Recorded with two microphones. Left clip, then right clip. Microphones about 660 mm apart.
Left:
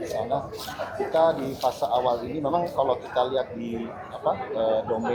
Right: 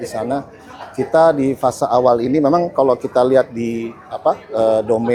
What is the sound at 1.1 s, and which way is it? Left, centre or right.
Speech, right.